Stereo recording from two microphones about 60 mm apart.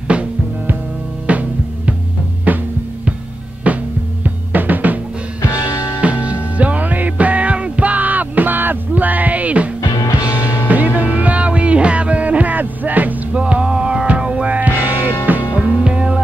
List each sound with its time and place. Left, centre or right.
0.1 s music: right
3.7 s music: right
5.4 s music: left
5.9 s music: right
9.8 s music: left
11.0 s music: right
13.4 s music: centre